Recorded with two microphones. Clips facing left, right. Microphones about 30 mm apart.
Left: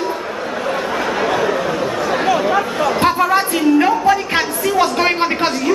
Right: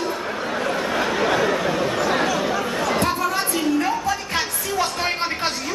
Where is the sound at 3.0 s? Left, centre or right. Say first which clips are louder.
Left 7 dB; left.